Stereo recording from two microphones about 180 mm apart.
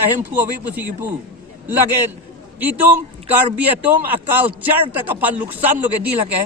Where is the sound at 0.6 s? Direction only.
10° right (ahead or behind).